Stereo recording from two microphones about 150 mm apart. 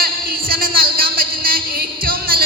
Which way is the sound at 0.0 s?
80° right.